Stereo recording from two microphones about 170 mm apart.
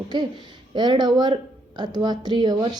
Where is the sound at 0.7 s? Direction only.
25° right (ahead or behind).